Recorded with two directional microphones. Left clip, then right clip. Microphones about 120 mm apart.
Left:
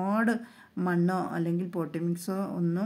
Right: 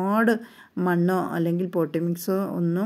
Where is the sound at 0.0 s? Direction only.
30° right (ahead or behind).